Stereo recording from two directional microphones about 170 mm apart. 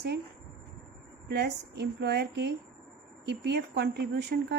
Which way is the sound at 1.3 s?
80° right.